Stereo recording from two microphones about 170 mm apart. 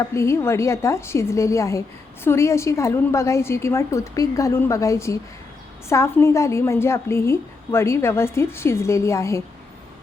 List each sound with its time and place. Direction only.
0.0 s a woman's voice: 15° left (ahead or behind)